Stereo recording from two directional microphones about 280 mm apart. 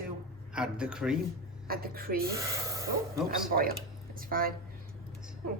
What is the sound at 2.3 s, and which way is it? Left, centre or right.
Speech, centre.